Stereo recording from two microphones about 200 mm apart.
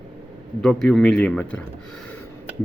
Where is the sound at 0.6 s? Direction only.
Centre (ahead or behind).